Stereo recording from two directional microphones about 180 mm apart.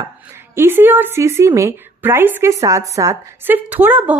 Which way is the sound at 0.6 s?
10° right (ahead or behind).